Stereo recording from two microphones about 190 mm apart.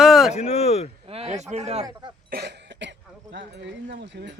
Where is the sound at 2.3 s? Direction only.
65° right (ahead or behind).